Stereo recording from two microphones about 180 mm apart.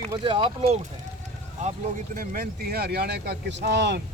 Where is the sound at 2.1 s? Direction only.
50° right (ahead or behind).